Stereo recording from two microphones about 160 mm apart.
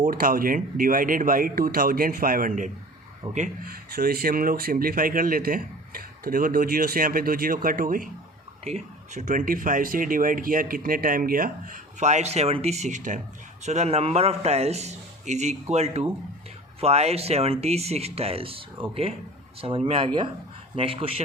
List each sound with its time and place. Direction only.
0.0 s a man's voice: 60° right (ahead or behind)
3.7 s speech: 65° right (ahead or behind)
8.6 s speech: 45° right (ahead or behind)